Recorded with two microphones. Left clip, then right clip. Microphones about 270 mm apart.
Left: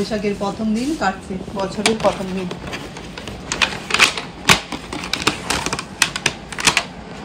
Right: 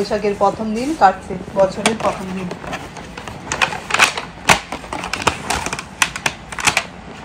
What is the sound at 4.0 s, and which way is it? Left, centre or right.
Typewriter, centre.